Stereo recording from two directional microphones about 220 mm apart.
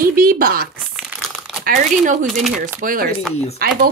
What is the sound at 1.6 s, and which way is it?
Speech, 35° right (ahead or behind).